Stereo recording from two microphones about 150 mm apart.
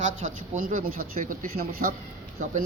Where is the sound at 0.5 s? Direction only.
65° right (ahead or behind).